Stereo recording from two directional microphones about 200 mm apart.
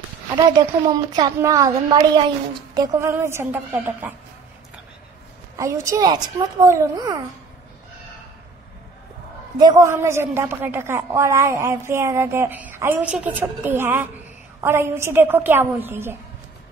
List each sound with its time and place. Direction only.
0.5 s a woman's voice: 20° right (ahead or behind)
5.6 s a woman's voice: 15° right (ahead or behind)
9.6 s a woman's voice: 20° right (ahead or behind)